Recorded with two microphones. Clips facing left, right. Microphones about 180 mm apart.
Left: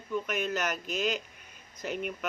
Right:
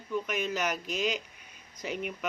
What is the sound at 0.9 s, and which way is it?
Speech, 50° left (ahead or behind).